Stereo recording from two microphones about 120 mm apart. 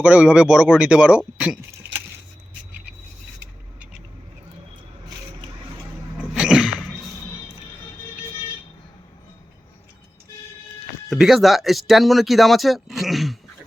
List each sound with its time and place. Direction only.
0.0 s speech: 10° right (ahead or behind)
6.1 s sneeze: 5° right (ahead or behind)
11.1 s speech: centre (ahead or behind)